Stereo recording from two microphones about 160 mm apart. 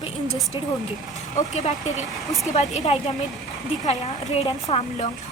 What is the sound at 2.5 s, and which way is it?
Speech, 45° left (ahead or behind).